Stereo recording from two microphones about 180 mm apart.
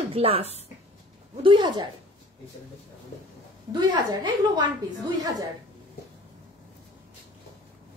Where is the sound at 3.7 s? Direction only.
25° right (ahead or behind).